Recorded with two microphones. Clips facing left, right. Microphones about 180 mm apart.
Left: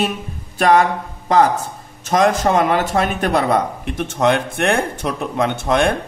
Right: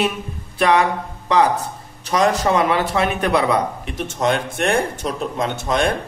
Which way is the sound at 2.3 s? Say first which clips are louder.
Left 2 dB; 50° left (ahead or behind).